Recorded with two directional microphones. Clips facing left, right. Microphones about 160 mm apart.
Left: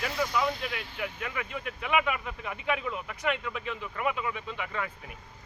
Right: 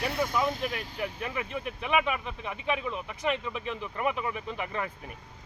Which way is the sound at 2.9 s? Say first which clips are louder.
Right 1 dB; 20° right (ahead or behind).